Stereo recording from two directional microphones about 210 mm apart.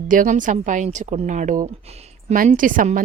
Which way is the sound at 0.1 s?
40° right (ahead or behind).